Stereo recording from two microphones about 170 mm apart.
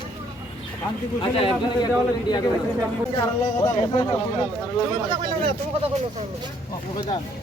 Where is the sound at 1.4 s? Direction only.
25° left (ahead or behind).